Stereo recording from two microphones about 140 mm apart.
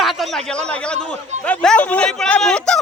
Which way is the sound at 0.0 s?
Centre (ahead or behind).